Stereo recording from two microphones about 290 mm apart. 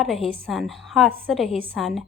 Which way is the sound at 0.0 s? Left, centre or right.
Centre.